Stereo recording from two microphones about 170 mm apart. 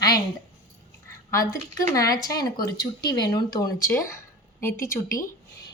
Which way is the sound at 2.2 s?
20° left (ahead or behind).